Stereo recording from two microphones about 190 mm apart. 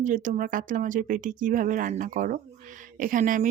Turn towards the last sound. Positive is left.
turn(degrees=-45)  # may be behind; listen again after turning